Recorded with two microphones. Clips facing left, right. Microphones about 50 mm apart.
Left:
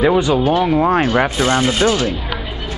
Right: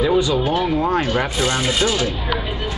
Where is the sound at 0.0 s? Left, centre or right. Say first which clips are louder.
Left 3 dB; left.